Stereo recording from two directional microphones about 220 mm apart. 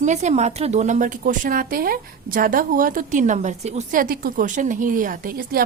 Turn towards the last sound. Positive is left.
turn(degrees=-40)  # may be behind; listen again after turning